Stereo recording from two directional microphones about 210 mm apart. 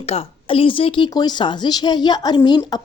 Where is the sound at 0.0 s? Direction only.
30° left (ahead or behind).